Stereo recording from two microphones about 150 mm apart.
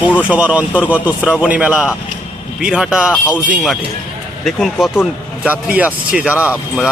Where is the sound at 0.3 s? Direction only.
10° right (ahead or behind).